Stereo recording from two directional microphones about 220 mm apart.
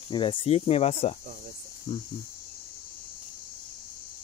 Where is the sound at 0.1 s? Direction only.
20° left (ahead or behind).